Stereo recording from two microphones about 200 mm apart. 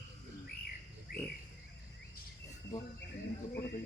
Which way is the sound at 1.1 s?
50° left (ahead or behind).